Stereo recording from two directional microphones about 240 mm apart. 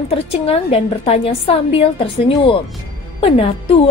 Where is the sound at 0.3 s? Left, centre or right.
Left.